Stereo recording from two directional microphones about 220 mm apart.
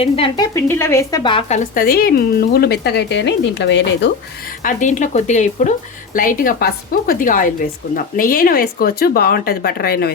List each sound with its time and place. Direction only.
0.0 s speech: 25° left (ahead or behind)
0.5 s a woman's voice: 10° left (ahead or behind); by 4.1 s 55° left (ahead or behind)
4.6 s a woman's voice: 35° left (ahead or behind)